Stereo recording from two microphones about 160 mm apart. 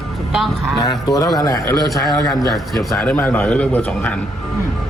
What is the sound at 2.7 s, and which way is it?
A man's voice, centre (ahead or behind).